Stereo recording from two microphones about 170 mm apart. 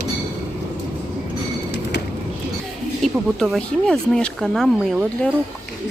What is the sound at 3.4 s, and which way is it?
Speech, 5° left (ahead or behind).